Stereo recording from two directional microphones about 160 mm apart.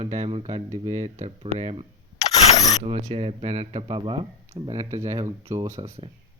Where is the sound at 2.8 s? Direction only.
35° right (ahead or behind); by 6.0 s 20° right (ahead or behind).